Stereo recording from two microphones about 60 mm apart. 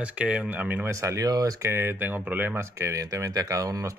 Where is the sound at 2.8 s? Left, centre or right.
Right.